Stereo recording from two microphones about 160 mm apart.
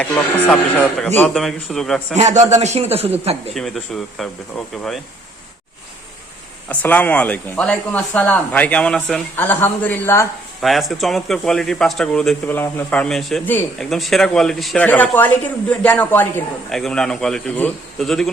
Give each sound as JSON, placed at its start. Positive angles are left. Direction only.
{"t": 0.0, "sound": "speech", "side_deg": 10}
{"t": 2.1, "sound": "a man's voice", "side_deg": -45}
{"t": 3.5, "sound": "speech", "side_deg": 0}
{"t": 6.7, "sound": "speech", "side_deg": 10}
{"t": 10.6, "sound": "speech", "side_deg": 0}